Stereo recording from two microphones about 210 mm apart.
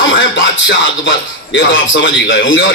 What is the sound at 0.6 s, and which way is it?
A man's voice, 60° left (ahead or behind).